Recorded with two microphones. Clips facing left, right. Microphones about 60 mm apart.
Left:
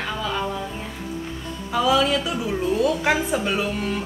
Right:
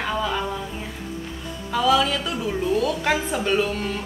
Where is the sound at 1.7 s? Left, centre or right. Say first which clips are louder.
Even; centre.